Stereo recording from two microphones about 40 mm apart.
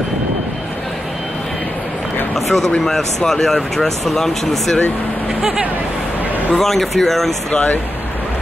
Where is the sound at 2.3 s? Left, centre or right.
Centre.